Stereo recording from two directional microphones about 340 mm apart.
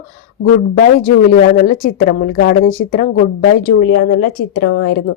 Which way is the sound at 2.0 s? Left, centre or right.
Left.